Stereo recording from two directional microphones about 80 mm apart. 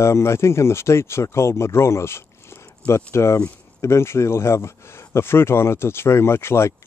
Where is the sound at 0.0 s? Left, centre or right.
Left.